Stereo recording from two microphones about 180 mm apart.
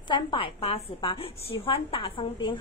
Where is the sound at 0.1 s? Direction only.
30° left (ahead or behind).